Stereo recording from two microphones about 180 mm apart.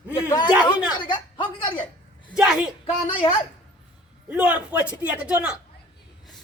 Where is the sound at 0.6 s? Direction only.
25° left (ahead or behind).